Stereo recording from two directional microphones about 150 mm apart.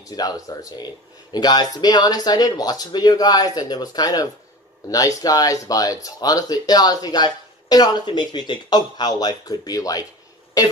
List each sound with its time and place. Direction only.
0.0 s speech: 25° left (ahead or behind)